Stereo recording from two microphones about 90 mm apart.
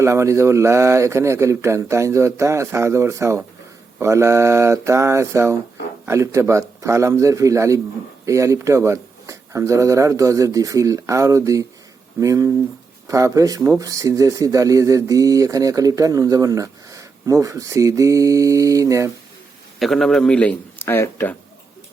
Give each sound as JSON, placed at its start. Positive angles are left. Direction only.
{"t": 0.0, "sound": "speech", "side_deg": -30}
{"t": 19.8, "sound": "a man's voice", "side_deg": 5}
{"t": 20.7, "sound": "speech", "side_deg": 25}